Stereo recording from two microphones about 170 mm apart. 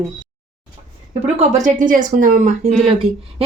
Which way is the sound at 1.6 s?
50° right (ahead or behind).